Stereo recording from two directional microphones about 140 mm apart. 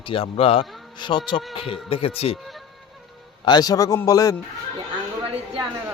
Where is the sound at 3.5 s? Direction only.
30° left (ahead or behind).